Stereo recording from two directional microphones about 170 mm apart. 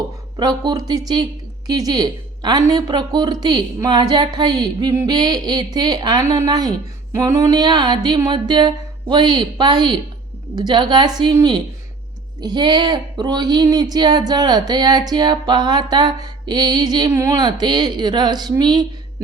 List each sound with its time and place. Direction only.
0.3 s speech: 25° right (ahead or behind)